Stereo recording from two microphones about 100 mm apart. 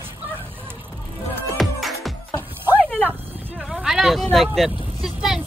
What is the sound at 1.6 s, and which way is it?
Music, centre (ahead or behind).